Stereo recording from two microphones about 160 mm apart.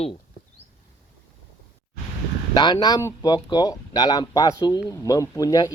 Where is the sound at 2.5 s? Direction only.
25° left (ahead or behind).